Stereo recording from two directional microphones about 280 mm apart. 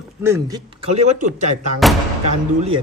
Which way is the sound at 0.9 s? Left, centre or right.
Right.